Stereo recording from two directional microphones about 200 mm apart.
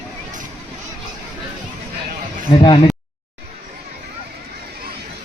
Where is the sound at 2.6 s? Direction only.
25° left (ahead or behind).